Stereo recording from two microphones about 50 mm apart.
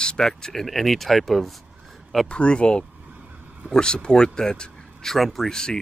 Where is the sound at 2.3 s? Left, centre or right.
Left.